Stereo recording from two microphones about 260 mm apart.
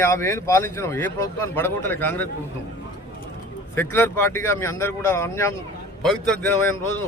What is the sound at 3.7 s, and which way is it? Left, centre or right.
A man's voice, centre.